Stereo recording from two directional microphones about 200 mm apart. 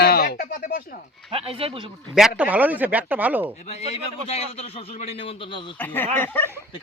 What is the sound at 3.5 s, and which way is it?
A man's voice, 30° left (ahead or behind).